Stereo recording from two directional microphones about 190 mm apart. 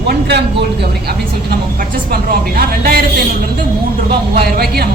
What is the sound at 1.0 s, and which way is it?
A woman's voice, 55° right (ahead or behind).